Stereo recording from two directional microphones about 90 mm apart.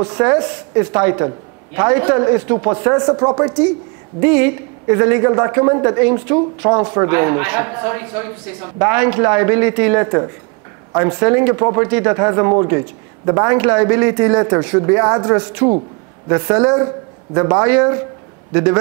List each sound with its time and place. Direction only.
0.0 s a woman's voice: 20° right (ahead or behind)